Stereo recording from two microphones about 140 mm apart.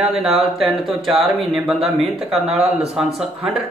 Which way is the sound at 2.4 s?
50° right (ahead or behind).